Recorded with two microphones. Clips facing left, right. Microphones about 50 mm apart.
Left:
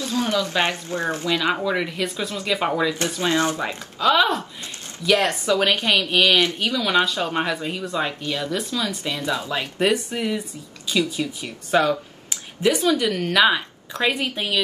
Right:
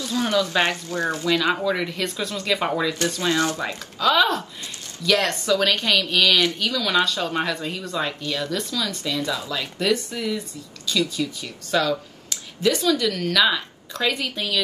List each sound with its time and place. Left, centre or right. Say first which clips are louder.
0.3 s speech: right 2 dB; left
1.5 s speech: even; centre
3.2 s a woman's voice: left 2 dB; left
4.0 s a woman's voice: left 1 dB; centre
8.2 s a woman's voice: left 1 dB; left